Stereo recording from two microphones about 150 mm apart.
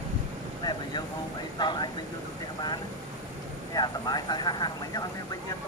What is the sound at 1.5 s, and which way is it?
Speech, 30° left (ahead or behind).